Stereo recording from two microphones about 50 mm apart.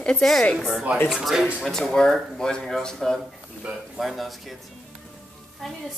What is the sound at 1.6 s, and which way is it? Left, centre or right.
Speech, centre.